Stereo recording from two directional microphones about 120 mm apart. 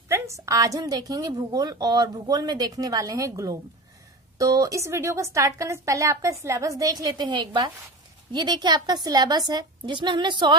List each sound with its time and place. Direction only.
0.1 s a woman's voice: 25° right (ahead or behind)